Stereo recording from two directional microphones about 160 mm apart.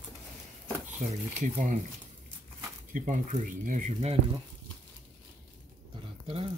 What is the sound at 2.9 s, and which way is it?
Speech, 50° right (ahead or behind).